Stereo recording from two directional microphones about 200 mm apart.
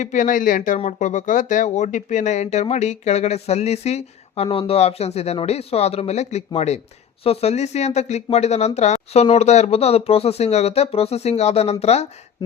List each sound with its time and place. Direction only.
0.0 s speech: 40° left (ahead or behind)